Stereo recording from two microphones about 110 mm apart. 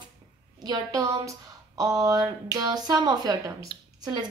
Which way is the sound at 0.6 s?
30° right (ahead or behind).